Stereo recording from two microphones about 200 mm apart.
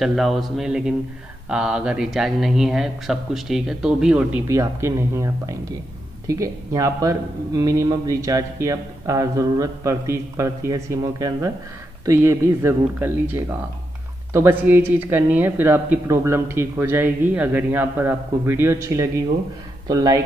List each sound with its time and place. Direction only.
0.0 s speech: centre (ahead or behind); by 20.2 s 15° right (ahead or behind)